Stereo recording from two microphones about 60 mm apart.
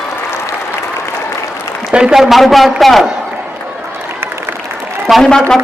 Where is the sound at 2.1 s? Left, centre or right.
Centre.